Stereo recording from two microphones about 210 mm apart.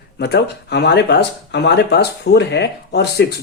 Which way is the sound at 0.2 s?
50° left (ahead or behind).